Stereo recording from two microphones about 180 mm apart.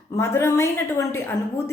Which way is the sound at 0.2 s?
15° left (ahead or behind).